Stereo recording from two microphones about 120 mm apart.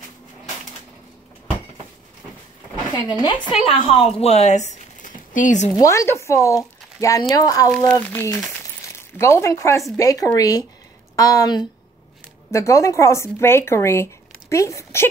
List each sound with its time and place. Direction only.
2.9 s a woman's voice: 35° left (ahead or behind)
3.5 s speech: 50° left (ahead or behind); by 5.7 s 90° left
5.8 s speech: 25° left (ahead or behind)
7.9 s a woman's voice: 15° left (ahead or behind)